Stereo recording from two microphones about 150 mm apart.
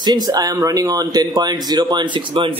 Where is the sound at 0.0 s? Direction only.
30° right (ahead or behind).